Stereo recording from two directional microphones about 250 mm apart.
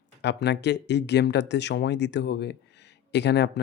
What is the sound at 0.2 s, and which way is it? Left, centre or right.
Speech, left.